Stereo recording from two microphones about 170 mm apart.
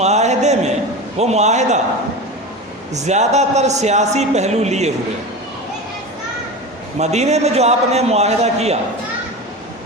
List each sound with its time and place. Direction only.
0.0 s a man's voice: 40° right (ahead or behind)
2.9 s a man's voice: 40° right (ahead or behind)
7.0 s a man's voice: 40° right (ahead or behind)